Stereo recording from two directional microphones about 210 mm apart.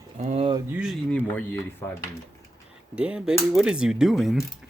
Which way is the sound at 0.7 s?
Centre (ahead or behind).